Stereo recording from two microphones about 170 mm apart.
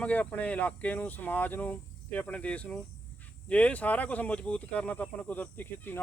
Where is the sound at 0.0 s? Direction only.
10° left (ahead or behind).